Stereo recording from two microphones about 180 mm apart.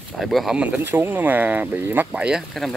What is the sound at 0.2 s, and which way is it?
Speech, centre (ahead or behind).